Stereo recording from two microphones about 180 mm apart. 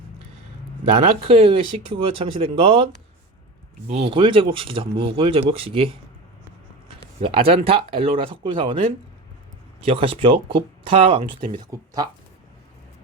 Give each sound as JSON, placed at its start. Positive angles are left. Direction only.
{"t": 0.9, "sound": "speech", "side_deg": -30}
{"t": 7.2, "sound": "speech", "side_deg": -30}